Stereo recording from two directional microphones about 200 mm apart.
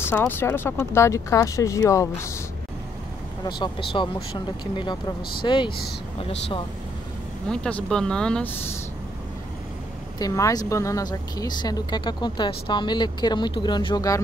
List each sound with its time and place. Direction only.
0.0 s speech: 10° left (ahead or behind)
3.4 s speech: 20° left (ahead or behind)
7.4 s speech: 5° left (ahead or behind)
10.1 s speech: 15° left (ahead or behind)